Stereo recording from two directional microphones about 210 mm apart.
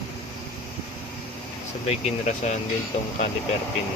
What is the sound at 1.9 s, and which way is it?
Speech, 35° left (ahead or behind).